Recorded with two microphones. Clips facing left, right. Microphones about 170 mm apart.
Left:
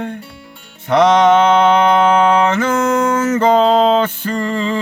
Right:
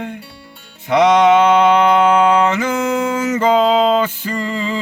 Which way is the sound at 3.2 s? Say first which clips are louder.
Even; 50° left (ahead or behind).